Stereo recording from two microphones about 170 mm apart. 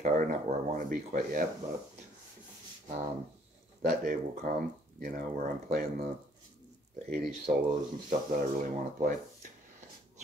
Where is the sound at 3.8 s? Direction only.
55° right (ahead or behind).